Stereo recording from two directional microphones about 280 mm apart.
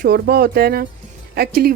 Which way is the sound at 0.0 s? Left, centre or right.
Right.